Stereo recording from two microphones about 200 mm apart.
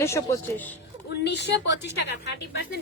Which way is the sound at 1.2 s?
60° left (ahead or behind).